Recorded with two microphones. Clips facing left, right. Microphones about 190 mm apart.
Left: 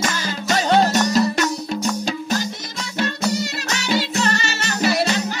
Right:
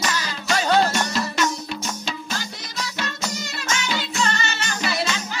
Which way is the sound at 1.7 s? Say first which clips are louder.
Left 7 dB; 40° left (ahead or behind).